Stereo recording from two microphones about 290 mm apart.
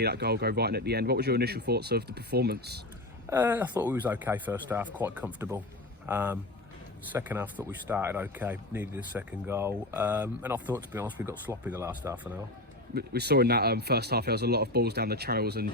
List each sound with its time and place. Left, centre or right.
0.0 s speech: right
3.2 s speech: centre
12.9 s speech: right